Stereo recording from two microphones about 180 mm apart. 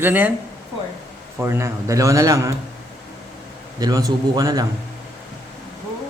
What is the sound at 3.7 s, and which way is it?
Speech, 20° right (ahead or behind).